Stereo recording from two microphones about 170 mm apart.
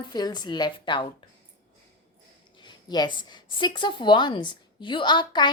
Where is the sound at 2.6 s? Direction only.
25° left (ahead or behind).